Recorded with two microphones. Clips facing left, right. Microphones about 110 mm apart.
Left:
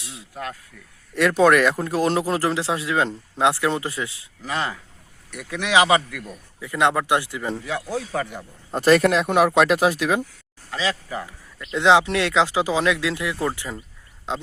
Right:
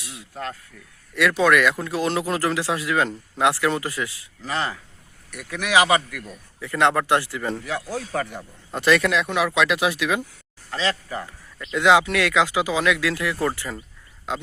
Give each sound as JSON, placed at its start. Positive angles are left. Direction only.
{"t": 0.0, "sound": "speech", "side_deg": 25}
{"t": 1.1, "sound": "speech", "side_deg": 40}
{"t": 8.7, "sound": "speech", "side_deg": 40}
{"t": 10.7, "sound": "a man's voice", "side_deg": 10}
{"t": 11.7, "sound": "speech", "side_deg": 25}